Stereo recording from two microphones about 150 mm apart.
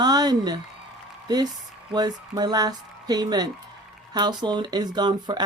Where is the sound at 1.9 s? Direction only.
25° right (ahead or behind).